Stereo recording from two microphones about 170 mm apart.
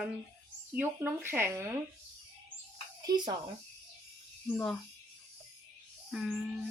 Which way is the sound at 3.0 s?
25° right (ahead or behind).